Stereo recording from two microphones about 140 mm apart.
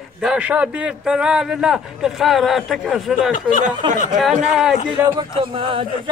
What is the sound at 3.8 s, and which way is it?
Speech, 35° right (ahead or behind).